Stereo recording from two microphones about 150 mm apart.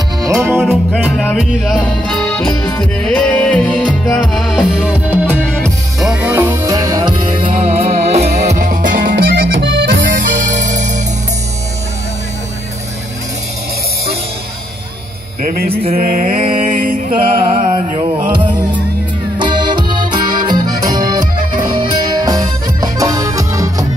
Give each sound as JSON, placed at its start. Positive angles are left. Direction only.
{"t": 0.2, "sound": "music", "side_deg": -20}
{"t": 0.5, "sound": "music", "side_deg": 0}
{"t": 5.5, "sound": "music", "side_deg": 5}
{"t": 6.0, "sound": "music", "side_deg": -10}
{"t": 9.0, "sound": "accordion", "side_deg": -90}
{"t": 15.4, "sound": "music", "side_deg": -85}
{"t": 15.9, "sound": "mantra", "side_deg": -70}
{"t": 17.5, "sound": "a sound", "side_deg": -55}
{"t": 17.7, "sound": "music", "side_deg": -30}
{"t": 19.3, "sound": "accordion", "side_deg": -30}
{"t": 21.6, "sound": "music", "side_deg": -30}